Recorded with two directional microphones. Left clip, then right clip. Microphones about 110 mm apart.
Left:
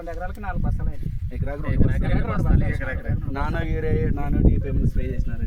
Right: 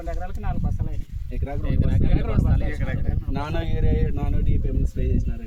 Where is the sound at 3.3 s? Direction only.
45° right (ahead or behind).